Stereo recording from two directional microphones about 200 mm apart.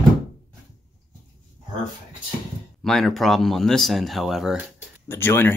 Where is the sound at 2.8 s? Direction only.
Centre (ahead or behind).